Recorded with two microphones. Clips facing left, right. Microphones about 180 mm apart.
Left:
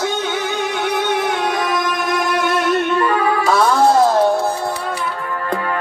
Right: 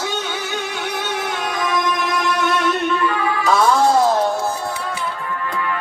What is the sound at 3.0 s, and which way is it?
Music, 45° left (ahead or behind).